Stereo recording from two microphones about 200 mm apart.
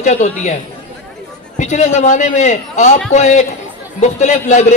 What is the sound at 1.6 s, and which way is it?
A man's voice, 35° left (ahead or behind).